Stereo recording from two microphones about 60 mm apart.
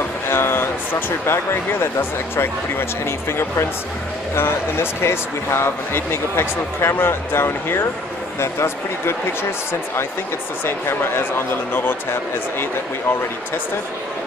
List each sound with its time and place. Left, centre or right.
0.3 s speech: left